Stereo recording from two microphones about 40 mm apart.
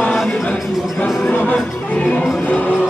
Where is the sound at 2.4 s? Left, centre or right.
Left.